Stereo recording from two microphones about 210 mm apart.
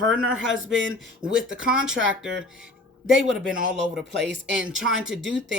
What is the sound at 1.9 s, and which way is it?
Speech, 60° right (ahead or behind).